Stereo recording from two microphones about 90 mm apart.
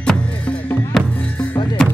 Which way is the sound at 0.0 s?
10° left (ahead or behind).